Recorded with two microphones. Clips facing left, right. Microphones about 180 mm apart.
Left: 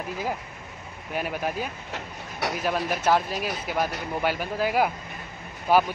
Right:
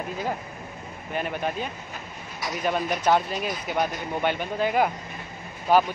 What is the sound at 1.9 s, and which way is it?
Speech, 75° left (ahead or behind).